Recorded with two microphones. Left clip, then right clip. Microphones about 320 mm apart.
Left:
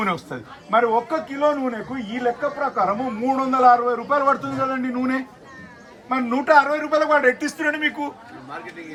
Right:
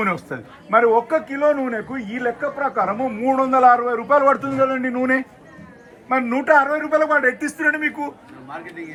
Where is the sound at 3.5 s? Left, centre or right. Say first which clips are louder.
Even; centre.